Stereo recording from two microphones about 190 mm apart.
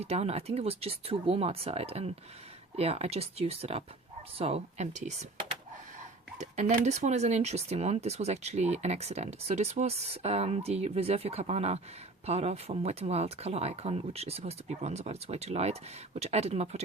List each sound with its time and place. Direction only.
0.0 s speech: 35° right (ahead or behind)
6.4 s speech: 40° right (ahead or behind)